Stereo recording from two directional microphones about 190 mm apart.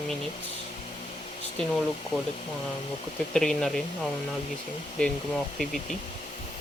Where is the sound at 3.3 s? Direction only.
5° left (ahead or behind).